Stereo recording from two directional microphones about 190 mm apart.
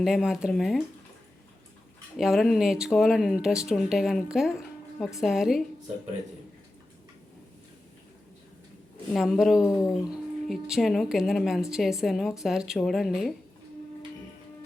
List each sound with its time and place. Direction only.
0.0 s speech: centre (ahead or behind)
2.1 s speech: centre (ahead or behind)
9.1 s speech: centre (ahead or behind)